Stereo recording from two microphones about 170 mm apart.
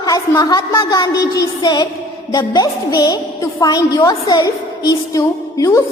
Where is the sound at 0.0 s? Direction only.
20° left (ahead or behind).